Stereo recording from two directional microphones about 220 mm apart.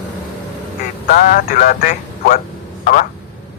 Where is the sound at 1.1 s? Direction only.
40° left (ahead or behind).